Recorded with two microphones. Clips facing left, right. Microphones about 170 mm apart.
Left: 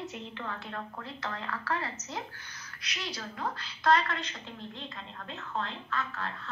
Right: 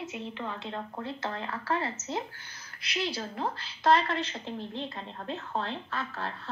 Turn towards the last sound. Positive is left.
turn(degrees=-30)  # may be behind; listen again after turning